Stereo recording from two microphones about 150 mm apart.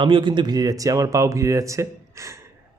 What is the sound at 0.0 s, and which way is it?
Speech, 35° right (ahead or behind).